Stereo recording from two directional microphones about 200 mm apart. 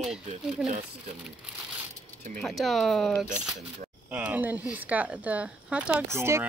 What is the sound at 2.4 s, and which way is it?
Speech, centre (ahead or behind).